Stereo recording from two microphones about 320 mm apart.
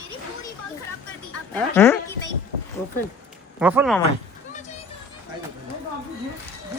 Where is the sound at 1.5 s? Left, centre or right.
Centre.